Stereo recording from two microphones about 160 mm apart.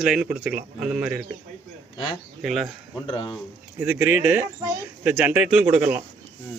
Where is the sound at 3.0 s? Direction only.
30° left (ahead or behind).